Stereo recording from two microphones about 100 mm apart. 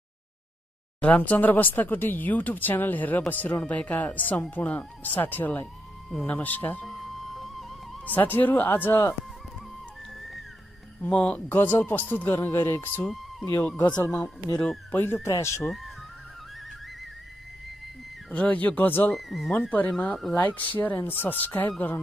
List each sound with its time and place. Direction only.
1.0 s speech: 15° left (ahead or behind)
6.8 s music: centre (ahead or behind)
8.0 s speech: 20° left (ahead or behind)
11.0 s speech: 10° left (ahead or behind)
13.0 s speech: centre (ahead or behind)
14.1 s speech: 35° left (ahead or behind)
14.6 s speech: 15° left (ahead or behind)
15.2 s speech: 30° left (ahead or behind)
15.6 s speech: centre (ahead or behind)
18.3 s speech: 15° left (ahead or behind)
19.1 s speech: centre (ahead or behind)
19.7 s speech: 15° left (ahead or behind)